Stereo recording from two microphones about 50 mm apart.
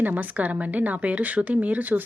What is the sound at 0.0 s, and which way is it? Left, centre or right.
A woman's voice, right.